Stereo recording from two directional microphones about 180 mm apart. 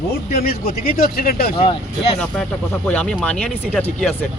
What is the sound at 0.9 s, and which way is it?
Speech, 55° left (ahead or behind).